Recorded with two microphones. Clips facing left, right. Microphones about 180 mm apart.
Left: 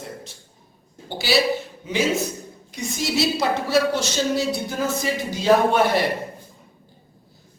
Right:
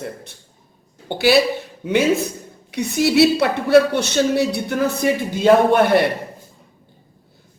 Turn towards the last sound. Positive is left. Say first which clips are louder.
# right 4 dB
turn(degrees=-55)  # may be behind; listen again after turning